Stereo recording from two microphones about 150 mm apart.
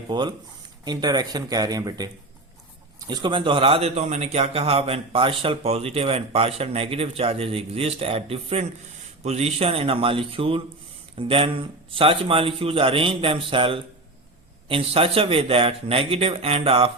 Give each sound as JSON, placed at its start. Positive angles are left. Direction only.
{"t": 0.1, "sound": "speech", "side_deg": -30}
{"t": 3.1, "sound": "a man's voice", "side_deg": -30}